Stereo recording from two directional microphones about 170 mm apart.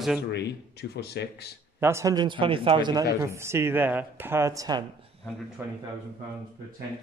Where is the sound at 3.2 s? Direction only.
15° right (ahead or behind).